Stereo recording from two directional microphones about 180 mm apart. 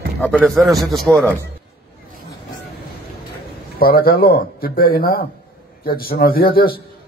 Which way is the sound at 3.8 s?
60° left (ahead or behind).